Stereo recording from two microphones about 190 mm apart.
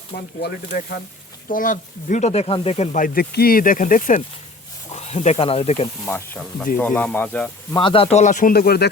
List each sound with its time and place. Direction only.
0.4 s speech: 50° left (ahead or behind); by 5.9 s 35° left (ahead or behind)
6.1 s speech: 10° left (ahead or behind)
7.8 s speech: 25° left (ahead or behind); by 8.9 s 55° left (ahead or behind)